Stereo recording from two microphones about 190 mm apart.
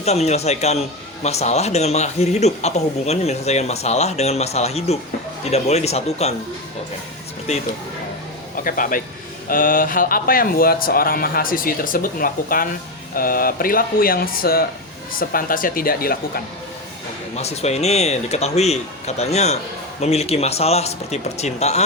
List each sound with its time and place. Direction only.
0.0 s a man's voice: 35° left (ahead or behind)
8.6 s speech: 45° left (ahead or behind)
17.3 s a man's voice: 35° left (ahead or behind)